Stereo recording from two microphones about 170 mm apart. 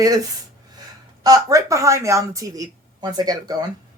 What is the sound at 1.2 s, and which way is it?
Speech, 20° right (ahead or behind).